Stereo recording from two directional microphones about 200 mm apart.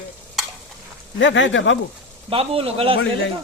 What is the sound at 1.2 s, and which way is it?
Speech, 65° left (ahead or behind).